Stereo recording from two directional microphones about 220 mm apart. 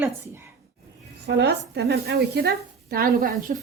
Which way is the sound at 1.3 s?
50° right (ahead or behind).